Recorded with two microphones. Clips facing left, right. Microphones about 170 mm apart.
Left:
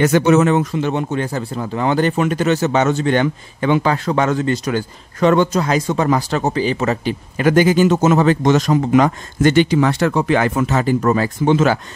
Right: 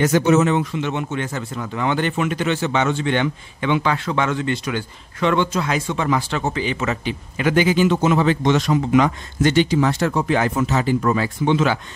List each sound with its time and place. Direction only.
0.0 s speech: 65° left (ahead or behind); by 11.8 s 45° left (ahead or behind)